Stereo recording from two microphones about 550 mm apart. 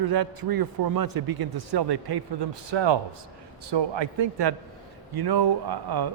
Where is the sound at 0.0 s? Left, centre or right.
Right.